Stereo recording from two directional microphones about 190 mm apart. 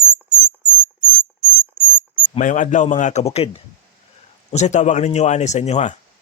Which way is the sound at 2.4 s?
40° left (ahead or behind).